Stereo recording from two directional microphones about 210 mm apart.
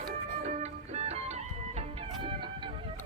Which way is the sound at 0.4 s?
30° right (ahead or behind).